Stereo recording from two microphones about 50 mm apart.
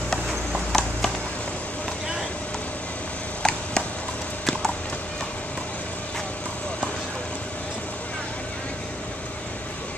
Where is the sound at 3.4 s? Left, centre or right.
Centre.